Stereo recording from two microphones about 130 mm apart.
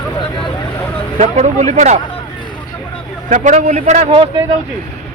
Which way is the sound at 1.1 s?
65° right (ahead or behind).